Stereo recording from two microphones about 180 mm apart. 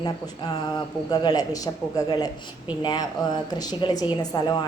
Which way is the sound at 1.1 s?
20° left (ahead or behind).